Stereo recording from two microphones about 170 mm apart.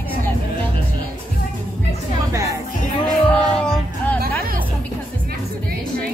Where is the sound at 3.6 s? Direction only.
5° left (ahead or behind).